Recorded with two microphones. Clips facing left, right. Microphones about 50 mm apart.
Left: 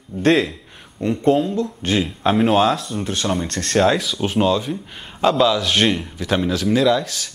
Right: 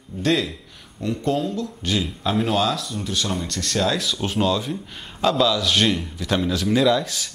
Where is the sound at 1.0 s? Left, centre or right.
Left.